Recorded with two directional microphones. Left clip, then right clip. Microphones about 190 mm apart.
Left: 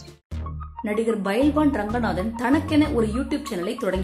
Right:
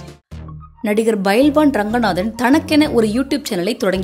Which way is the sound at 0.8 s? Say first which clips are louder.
Right 7 dB; 40° right (ahead or behind).